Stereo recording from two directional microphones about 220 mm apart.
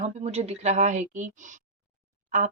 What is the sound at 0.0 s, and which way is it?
A woman's voice, 30° right (ahead or behind).